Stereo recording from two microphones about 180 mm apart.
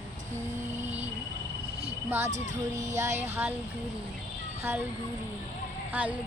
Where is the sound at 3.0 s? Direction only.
15° right (ahead or behind).